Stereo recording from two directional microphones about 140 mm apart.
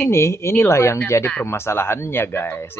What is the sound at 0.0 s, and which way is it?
Speech, 20° left (ahead or behind).